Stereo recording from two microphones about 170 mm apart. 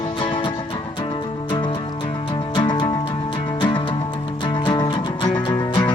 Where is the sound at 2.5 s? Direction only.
30° left (ahead or behind).